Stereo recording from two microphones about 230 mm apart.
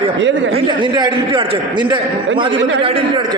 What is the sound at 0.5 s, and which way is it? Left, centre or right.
A man's voice, right.